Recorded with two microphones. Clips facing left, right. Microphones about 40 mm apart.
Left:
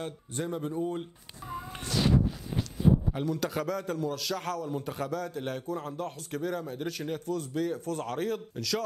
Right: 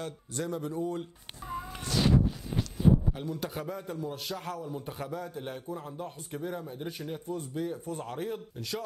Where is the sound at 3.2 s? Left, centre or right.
Left.